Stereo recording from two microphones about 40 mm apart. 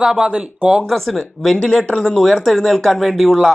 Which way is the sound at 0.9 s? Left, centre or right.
Centre.